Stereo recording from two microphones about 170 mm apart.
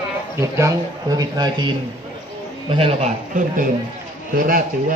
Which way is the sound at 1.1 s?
25° right (ahead or behind).